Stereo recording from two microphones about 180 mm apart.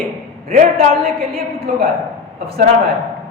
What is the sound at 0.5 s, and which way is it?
Speech, 55° right (ahead or behind).